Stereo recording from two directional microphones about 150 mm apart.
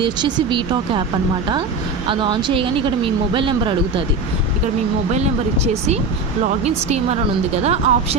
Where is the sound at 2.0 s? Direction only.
30° right (ahead or behind).